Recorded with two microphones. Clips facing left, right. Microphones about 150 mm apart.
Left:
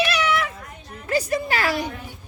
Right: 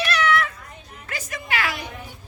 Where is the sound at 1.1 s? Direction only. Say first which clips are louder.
Left 8 dB; 35° left (ahead or behind).